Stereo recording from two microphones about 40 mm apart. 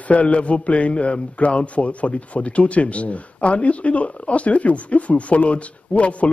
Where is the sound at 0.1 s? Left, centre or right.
Left.